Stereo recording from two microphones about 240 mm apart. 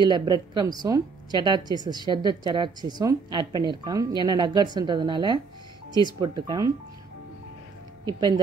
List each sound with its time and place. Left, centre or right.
0.0 s a woman's voice: centre